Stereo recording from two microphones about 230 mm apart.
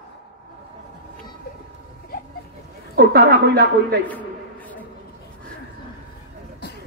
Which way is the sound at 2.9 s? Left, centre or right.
Right.